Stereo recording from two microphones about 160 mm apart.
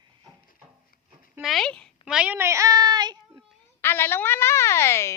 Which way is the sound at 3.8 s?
15° left (ahead or behind).